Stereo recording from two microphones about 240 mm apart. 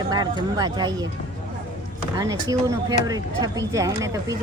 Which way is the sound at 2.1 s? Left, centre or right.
Centre.